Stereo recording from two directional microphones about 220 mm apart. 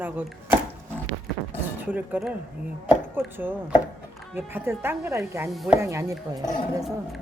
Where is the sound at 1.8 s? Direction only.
5° right (ahead or behind).